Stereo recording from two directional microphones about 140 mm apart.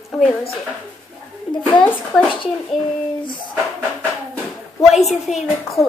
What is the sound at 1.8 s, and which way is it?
A woman's voice, 10° left (ahead or behind).